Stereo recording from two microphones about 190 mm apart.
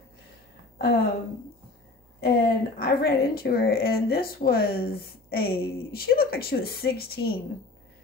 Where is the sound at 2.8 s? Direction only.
50° left (ahead or behind).